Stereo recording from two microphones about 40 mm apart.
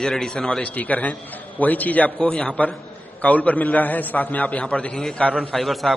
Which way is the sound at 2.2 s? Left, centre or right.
Left.